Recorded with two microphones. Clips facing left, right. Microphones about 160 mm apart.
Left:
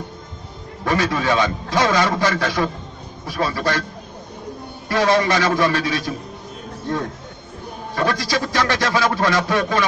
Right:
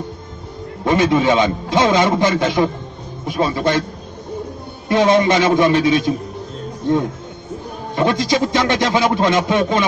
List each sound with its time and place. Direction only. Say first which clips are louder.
0.8 s speech: right 5 dB; 20° right (ahead or behind)
4.8 s speech: right 4 dB; 20° right (ahead or behind)
7.9 s speech: right 5 dB; 20° right (ahead or behind)